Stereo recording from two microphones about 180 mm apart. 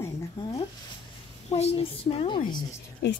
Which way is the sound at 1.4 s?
35° left (ahead or behind).